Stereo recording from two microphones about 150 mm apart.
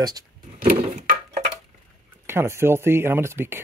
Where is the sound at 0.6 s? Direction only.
65° right (ahead or behind).